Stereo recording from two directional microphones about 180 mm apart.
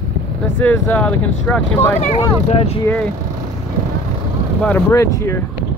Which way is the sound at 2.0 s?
40° left (ahead or behind).